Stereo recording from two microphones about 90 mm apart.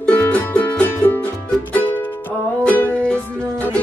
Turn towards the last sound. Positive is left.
turn(degrees=15)  # may be behind; listen again after turning